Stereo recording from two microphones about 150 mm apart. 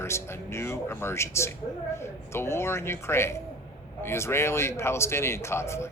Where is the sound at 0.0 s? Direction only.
15° left (ahead or behind).